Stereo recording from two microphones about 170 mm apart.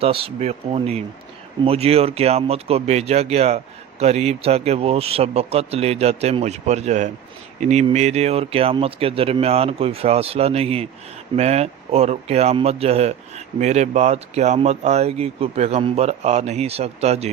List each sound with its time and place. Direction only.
0.0 s speech: 35° right (ahead or behind)